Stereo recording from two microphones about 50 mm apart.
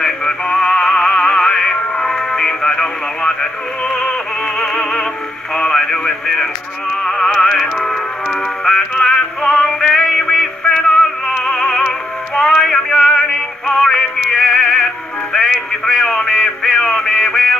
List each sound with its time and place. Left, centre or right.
0.0 s music: centre
5.5 s a man's voice: centre
7.0 s music: centre
15.3 s a sound: centre
17.0 s music: centre